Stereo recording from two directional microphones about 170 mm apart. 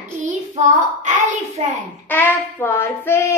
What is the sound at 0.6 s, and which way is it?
Child singing, 45° right (ahead or behind).